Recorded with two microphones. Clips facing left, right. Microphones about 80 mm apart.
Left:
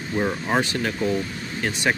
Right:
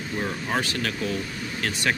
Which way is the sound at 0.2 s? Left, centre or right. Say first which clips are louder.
Left 5 dB; left.